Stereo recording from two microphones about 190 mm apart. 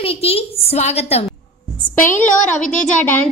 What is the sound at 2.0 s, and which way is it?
Speech, 45° left (ahead or behind).